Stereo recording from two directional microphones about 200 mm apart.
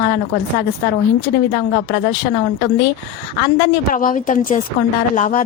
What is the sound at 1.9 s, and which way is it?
Speech, 50° left (ahead or behind).